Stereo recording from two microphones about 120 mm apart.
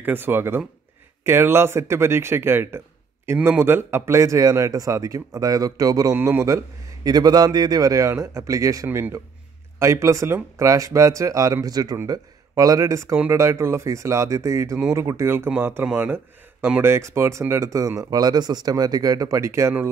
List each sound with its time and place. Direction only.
0.0 s speech: 15° right (ahead or behind)